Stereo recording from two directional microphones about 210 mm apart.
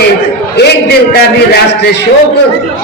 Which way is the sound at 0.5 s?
50° left (ahead or behind).